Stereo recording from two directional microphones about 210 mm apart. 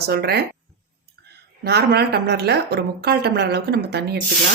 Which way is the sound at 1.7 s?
50° right (ahead or behind).